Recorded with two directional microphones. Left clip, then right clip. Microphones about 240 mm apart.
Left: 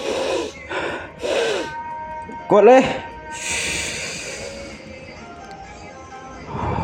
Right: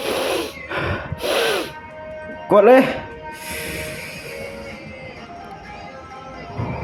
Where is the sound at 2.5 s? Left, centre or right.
Centre.